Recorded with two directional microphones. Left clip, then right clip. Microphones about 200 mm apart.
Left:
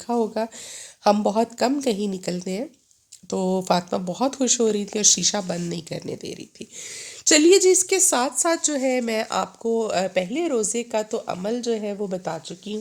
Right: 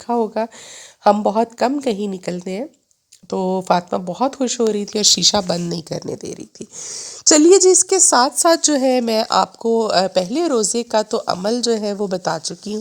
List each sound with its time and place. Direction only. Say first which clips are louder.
0.1 s speech: right 4 dB; 15° right (ahead or behind)
4.9 s speech: right 8 dB; 35° right (ahead or behind)